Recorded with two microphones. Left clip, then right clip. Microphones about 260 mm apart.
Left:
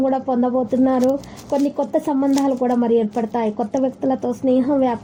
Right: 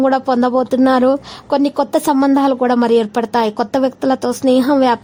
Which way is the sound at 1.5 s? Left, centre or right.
Right.